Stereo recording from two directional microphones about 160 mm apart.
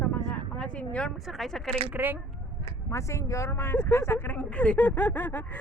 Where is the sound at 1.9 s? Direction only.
10° right (ahead or behind).